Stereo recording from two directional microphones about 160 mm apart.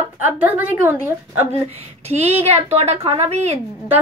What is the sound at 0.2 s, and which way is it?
A woman's voice, 10° right (ahead or behind).